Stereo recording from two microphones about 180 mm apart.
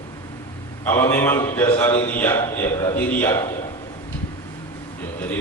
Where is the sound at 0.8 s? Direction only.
15° left (ahead or behind).